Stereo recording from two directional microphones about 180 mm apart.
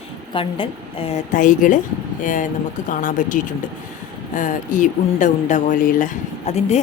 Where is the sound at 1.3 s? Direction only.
45° left (ahead or behind).